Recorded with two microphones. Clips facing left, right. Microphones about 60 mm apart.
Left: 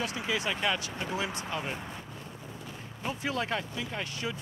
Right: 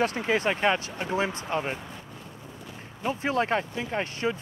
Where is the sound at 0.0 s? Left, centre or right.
Right.